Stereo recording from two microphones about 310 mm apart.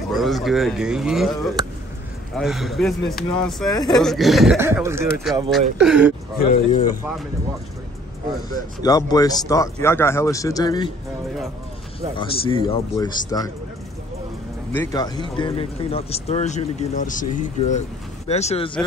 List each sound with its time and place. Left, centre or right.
0.1 s speech: centre
6.4 s speech: left
8.8 s a man's voice: centre
12.2 s a man's voice: centre
14.7 s speech: centre